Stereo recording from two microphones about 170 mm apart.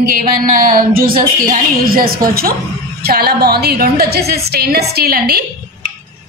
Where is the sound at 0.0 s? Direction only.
55° right (ahead or behind).